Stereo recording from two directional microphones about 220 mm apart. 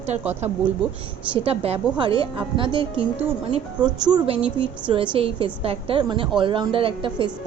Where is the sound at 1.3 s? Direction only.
25° right (ahead or behind).